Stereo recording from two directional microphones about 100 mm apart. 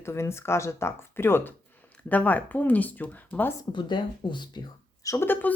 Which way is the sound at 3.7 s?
50° left (ahead or behind).